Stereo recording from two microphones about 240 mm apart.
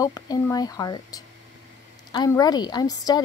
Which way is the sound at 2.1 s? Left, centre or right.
Centre.